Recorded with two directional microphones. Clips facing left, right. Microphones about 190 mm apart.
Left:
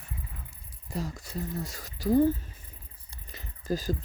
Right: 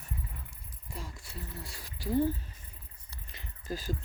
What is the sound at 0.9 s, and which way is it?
Speech, 40° left (ahead or behind).